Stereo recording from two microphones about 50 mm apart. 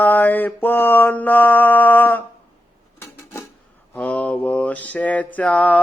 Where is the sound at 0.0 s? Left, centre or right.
Left.